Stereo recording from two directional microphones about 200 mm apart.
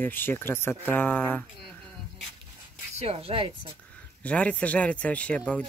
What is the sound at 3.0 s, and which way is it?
Speech, 30° right (ahead or behind).